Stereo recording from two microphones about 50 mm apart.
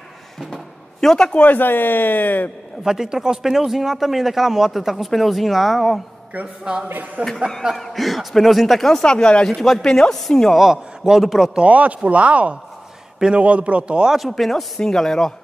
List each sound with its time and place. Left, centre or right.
1.0 s a man's voice: centre
1.4 s speech: left
2.8 s speech: centre
6.4 s speech: centre
6.9 s speech: right
7.7 s a man's voice: centre
9.5 s speech: centre
10.5 s a man's voice: centre
11.6 s speech: right
14.1 s a man's voice: centre